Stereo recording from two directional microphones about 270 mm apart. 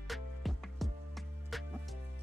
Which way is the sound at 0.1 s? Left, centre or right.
Centre.